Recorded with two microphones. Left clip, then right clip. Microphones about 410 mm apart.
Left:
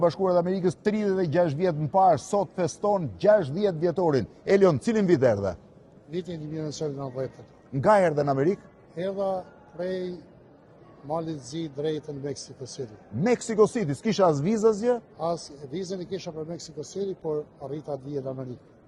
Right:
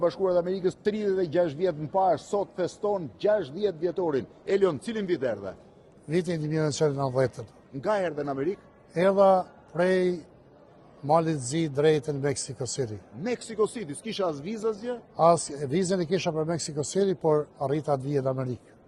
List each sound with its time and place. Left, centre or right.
0.0 s speech: left
6.1 s a man's voice: right
7.8 s speech: left
9.0 s a man's voice: right
11.1 s a man's voice: right
13.2 s speech: left
15.2 s a man's voice: right